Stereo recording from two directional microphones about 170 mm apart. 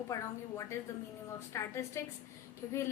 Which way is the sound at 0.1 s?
15° left (ahead or behind).